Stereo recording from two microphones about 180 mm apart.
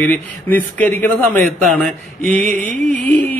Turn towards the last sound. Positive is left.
turn(degrees=10)  # may be behind; listen again after turning